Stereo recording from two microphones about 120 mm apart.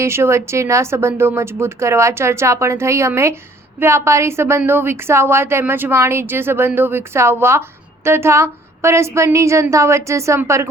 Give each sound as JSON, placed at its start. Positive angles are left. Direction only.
{"t": 0.0, "sound": "a woman's voice", "side_deg": -20}